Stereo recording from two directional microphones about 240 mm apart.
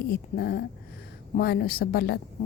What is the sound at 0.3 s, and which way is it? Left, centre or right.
Speech, left.